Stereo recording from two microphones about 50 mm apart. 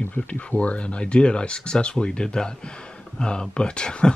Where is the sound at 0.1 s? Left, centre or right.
Left.